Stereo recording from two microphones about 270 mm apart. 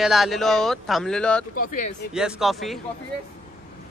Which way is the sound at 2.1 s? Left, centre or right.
Centre.